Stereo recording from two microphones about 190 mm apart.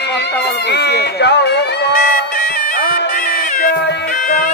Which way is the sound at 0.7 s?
60° left (ahead or behind).